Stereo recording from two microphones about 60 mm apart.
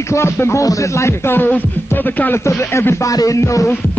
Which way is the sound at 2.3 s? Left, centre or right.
Left.